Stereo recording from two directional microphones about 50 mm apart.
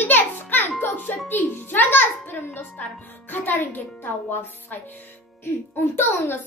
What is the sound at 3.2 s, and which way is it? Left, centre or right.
Speech, left.